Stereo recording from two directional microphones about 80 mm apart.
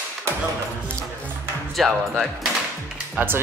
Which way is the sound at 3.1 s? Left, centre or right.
Right.